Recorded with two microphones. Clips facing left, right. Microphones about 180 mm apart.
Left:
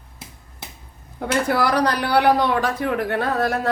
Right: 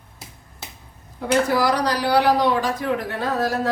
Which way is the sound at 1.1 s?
60° left (ahead or behind).